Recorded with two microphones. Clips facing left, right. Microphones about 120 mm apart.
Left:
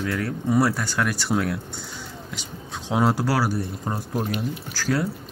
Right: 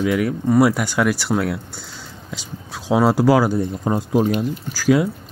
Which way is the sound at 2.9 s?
10° right (ahead or behind).